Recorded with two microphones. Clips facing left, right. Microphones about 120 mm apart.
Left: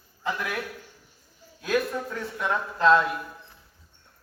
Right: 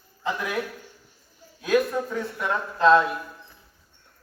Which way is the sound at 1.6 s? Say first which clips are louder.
Right 4 dB; 10° right (ahead or behind).